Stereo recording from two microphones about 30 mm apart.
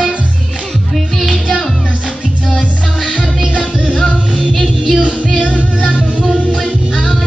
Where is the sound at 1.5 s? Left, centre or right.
Centre.